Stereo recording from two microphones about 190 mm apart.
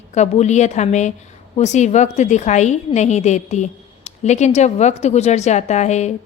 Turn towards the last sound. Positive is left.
turn(degrees=35)  # may be behind; listen again after turning